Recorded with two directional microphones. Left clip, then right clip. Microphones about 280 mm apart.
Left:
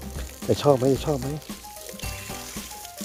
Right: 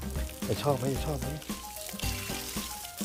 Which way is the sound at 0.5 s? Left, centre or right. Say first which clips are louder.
Left 10 dB; left.